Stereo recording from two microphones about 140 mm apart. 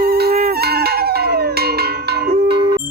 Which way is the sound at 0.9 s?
90° right.